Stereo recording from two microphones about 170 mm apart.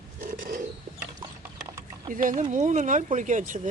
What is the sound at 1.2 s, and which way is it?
Horse, 15° right (ahead or behind).